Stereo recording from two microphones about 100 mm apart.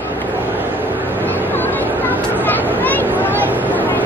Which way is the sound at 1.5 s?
20° left (ahead or behind).